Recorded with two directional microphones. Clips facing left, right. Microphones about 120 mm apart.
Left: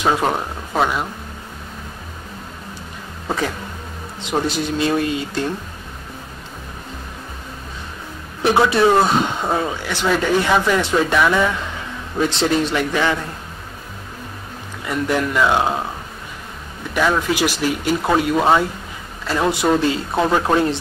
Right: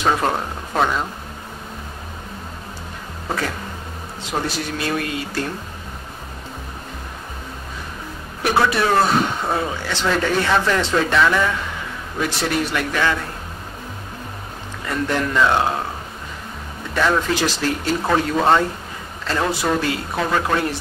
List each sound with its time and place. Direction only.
0.0 s a sound: 10° left (ahead or behind)
4.2 s speech: 20° left (ahead or behind)
8.4 s speech: 25° left (ahead or behind)
12.2 s speech: 25° left (ahead or behind)
14.9 s speech: 10° left (ahead or behind)
16.9 s speech: 10° left (ahead or behind)